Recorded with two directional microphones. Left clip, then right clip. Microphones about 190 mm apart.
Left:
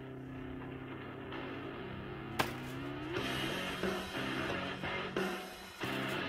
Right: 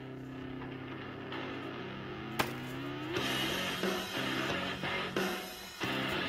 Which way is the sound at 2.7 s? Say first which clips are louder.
Right 3 dB; 40° right (ahead or behind).